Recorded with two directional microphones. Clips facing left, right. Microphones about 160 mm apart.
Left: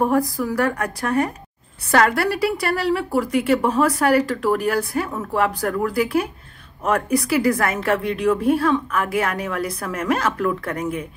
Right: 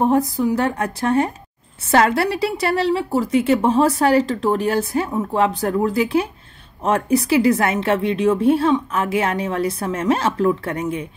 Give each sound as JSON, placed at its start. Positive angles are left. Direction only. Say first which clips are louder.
{"t": 0.0, "sound": "a woman's voice", "louder": "right 2 dB", "side_deg": -20}